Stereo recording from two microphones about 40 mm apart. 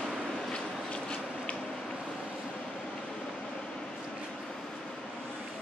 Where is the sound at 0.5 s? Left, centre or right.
Left.